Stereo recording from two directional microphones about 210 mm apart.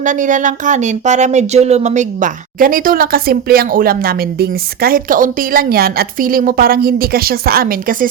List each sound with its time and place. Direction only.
0.0 s speech: 40° right (ahead or behind)